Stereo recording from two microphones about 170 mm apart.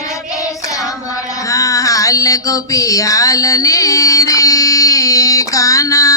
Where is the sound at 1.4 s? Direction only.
20° left (ahead or behind).